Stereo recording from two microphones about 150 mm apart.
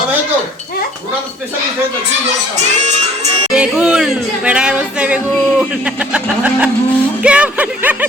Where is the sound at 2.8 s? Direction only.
50° right (ahead or behind).